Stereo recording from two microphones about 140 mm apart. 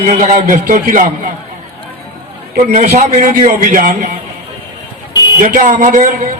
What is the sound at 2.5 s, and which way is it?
A man's voice, 60° right (ahead or behind).